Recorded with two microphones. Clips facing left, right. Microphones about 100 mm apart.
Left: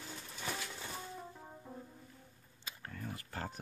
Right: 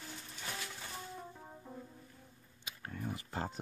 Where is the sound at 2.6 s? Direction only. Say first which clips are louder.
Right 3 dB; 15° right (ahead or behind).